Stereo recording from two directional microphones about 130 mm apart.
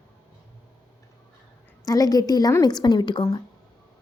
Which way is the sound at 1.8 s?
25° left (ahead or behind).